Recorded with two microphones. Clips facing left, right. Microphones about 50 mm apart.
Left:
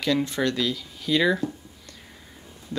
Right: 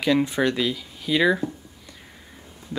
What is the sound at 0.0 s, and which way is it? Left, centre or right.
Speech, centre.